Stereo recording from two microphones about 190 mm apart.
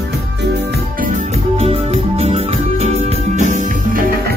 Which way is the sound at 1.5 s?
30° right (ahead or behind).